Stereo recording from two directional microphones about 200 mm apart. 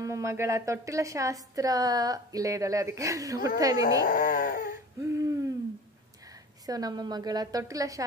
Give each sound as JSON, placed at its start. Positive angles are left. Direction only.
{"t": 0.0, "sound": "a woman's voice", "side_deg": -15}
{"t": 4.0, "sound": "speech", "side_deg": 45}
{"t": 5.0, "sound": "a sound", "side_deg": -15}
{"t": 6.6, "sound": "a woman's voice", "side_deg": -20}